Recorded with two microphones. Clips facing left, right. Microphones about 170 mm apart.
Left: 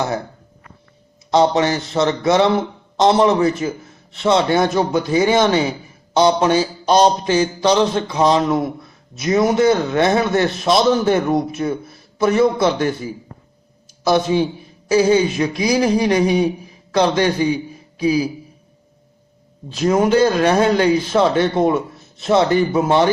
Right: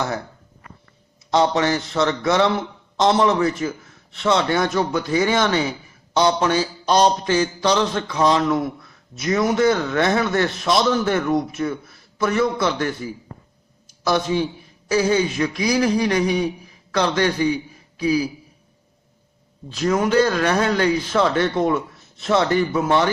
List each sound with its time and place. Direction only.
1.3 s a man's voice: 20° left (ahead or behind)
19.7 s a man's voice: 25° left (ahead or behind)